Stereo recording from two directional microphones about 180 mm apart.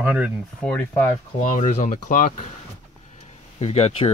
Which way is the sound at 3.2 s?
35° left (ahead or behind).